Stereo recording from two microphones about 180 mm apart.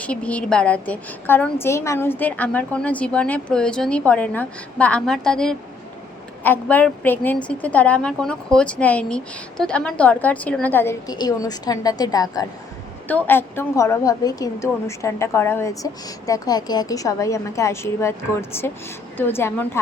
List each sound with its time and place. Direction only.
0.0 s a woman's voice: 5° left (ahead or behind)